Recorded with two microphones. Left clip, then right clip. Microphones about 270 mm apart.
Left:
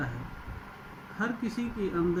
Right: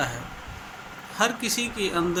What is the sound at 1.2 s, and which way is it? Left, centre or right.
Speech, right.